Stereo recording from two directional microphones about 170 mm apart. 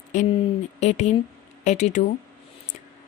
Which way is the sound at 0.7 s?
40° left (ahead or behind).